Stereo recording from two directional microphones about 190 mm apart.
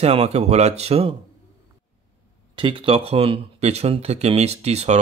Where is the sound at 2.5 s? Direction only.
25° right (ahead or behind).